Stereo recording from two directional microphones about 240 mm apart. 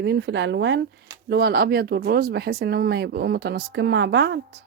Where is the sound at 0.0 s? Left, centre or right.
Right.